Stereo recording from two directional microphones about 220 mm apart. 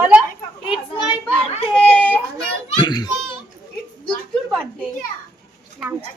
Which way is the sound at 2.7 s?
20° left (ahead or behind).